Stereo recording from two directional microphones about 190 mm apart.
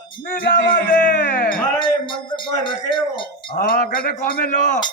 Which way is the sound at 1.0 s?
45° left (ahead or behind).